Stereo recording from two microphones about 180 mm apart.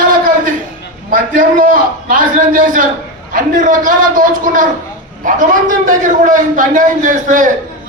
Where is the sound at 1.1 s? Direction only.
50° right (ahead or behind).